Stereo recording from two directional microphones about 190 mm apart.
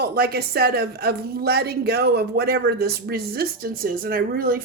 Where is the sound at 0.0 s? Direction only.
55° right (ahead or behind).